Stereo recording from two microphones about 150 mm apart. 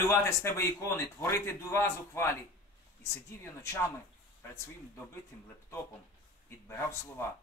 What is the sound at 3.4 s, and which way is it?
Speech, 15° left (ahead or behind).